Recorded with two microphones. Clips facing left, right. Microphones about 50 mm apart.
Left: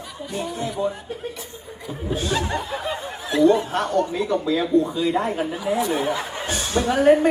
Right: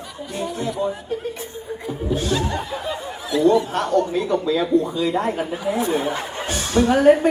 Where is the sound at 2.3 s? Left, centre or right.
Left.